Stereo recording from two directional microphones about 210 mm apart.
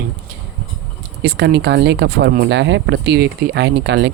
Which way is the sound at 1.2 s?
55° right (ahead or behind).